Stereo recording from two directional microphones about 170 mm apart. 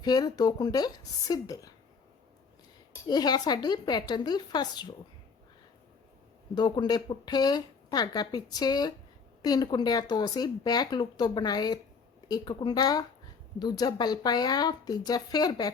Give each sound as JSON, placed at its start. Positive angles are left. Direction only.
{"t": 0.0, "sound": "speech", "side_deg": 25}
{"t": 3.1, "sound": "speech", "side_deg": 25}
{"t": 6.5, "sound": "speech", "side_deg": 25}